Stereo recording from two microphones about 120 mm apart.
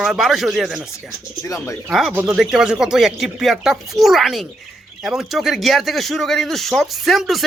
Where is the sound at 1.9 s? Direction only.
5° right (ahead or behind).